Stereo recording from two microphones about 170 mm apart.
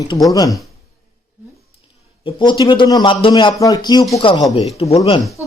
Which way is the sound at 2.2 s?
25° left (ahead or behind).